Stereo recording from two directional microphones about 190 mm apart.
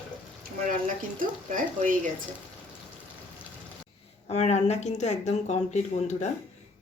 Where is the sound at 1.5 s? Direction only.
45° right (ahead or behind).